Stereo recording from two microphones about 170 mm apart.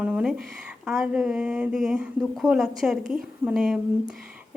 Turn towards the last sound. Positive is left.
turn(degrees=0)  # may be behind; listen again after turning